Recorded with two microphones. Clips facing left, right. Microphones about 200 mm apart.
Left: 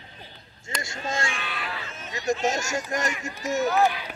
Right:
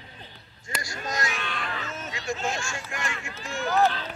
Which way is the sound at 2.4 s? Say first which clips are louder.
Left 5 dB; 40° left (ahead or behind).